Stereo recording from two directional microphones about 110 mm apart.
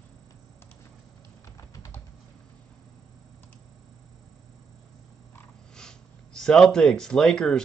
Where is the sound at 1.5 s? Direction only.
30° left (ahead or behind).